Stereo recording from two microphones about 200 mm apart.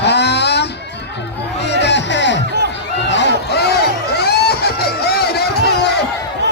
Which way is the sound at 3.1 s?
60° left (ahead or behind).